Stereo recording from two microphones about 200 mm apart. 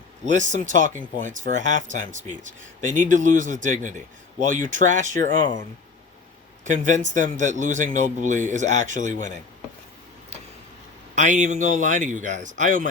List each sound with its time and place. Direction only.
0.3 s speech: 40° right (ahead or behind)
6.7 s speech: 40° right (ahead or behind)
11.1 s speech: 35° right (ahead or behind)